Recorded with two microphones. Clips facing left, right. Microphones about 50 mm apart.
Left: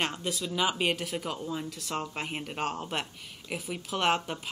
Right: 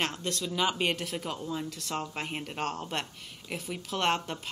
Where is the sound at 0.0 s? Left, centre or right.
Centre.